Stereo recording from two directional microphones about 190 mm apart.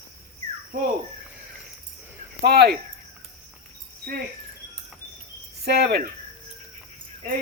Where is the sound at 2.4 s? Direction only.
60° right (ahead or behind).